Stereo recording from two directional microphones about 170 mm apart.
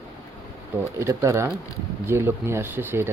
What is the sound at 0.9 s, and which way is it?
Speech, 15° right (ahead or behind).